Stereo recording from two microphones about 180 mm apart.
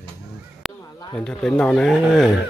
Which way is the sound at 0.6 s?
5° left (ahead or behind).